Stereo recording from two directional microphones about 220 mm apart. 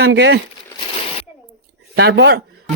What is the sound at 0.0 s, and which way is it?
Speech, 55° right (ahead or behind).